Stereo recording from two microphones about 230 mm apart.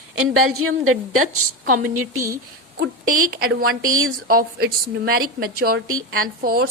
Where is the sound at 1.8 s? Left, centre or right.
Right.